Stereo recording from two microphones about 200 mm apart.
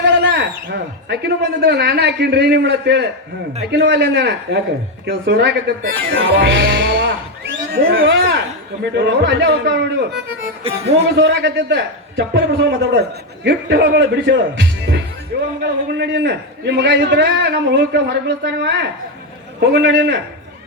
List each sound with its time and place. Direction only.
0.2 s a man's voice: 60° right (ahead or behind)
10.6 s speech: 30° right (ahead or behind)
11.2 s a man's voice: 65° right (ahead or behind)